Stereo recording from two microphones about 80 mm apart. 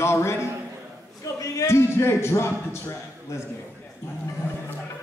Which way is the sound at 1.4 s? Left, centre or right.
Left.